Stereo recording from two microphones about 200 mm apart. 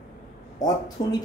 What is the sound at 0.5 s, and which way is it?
Speech, 20° left (ahead or behind).